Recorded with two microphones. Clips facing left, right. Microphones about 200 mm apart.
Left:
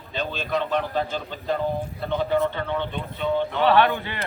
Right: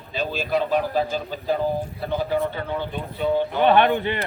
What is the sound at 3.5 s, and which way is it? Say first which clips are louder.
Speech: right 2 dB; 20° right (ahead or behind).